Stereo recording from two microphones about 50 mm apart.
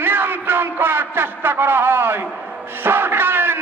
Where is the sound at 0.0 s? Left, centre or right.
Right.